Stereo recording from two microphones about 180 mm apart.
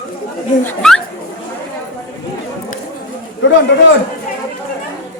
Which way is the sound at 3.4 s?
90° left.